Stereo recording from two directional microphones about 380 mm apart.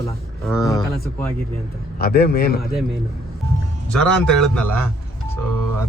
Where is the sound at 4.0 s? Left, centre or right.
Centre.